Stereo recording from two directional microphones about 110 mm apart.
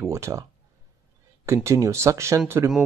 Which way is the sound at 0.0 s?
25° right (ahead or behind).